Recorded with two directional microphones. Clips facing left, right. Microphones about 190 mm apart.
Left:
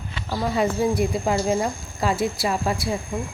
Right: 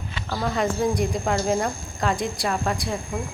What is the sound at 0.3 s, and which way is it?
Speech, 5° left (ahead or behind).